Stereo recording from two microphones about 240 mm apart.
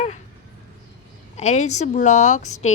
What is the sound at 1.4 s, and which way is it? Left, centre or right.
A woman's voice, left.